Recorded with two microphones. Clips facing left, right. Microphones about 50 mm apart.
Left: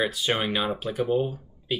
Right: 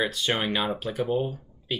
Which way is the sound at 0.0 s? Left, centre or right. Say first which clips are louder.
Left 1 dB; centre.